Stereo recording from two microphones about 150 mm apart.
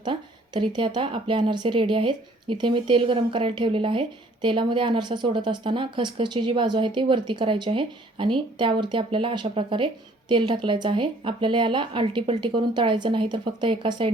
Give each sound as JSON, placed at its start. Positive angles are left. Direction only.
{"t": 0.0, "sound": "a woman's voice", "side_deg": -30}